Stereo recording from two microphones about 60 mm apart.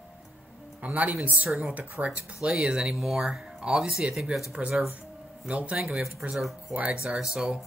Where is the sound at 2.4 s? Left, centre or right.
Centre.